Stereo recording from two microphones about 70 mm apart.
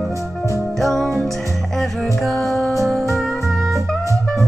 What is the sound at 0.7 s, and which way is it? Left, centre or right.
Music, centre.